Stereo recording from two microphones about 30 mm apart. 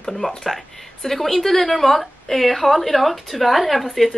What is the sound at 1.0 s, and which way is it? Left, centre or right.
A woman's voice, centre.